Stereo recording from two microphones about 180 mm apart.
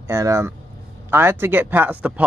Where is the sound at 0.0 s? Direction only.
15° right (ahead or behind).